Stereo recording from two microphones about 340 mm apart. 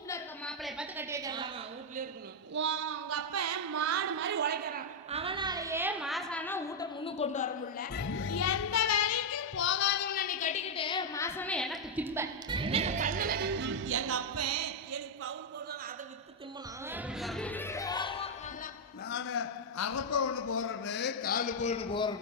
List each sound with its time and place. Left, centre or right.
0.1 s a sound: centre
2.6 s speech: right; by 8.0 s left
8.1 s child singing: left; by 15.3 s right
16.9 s music: centre
19.0 s a man's voice: left; by 22.1 s centre